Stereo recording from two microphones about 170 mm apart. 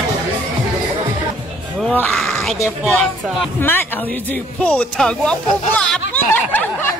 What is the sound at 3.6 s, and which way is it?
Speech, 10° left (ahead or behind).